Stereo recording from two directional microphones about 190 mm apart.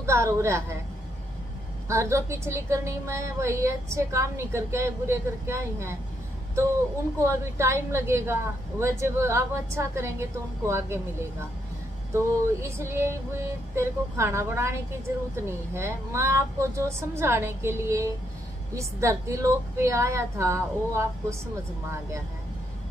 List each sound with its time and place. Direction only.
0.0 s a woman's voice: 15° right (ahead or behind)
1.9 s a woman's voice: 15° right (ahead or behind)
7.2 s a woman's voice: 15° right (ahead or behind)
12.1 s a woman's voice: 15° right (ahead or behind)